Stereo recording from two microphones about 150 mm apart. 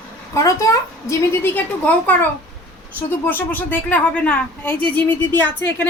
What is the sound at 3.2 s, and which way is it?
A woman's voice, 15° left (ahead or behind).